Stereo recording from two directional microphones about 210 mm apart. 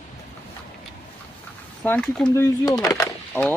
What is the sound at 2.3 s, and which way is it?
Speech, 15° left (ahead or behind).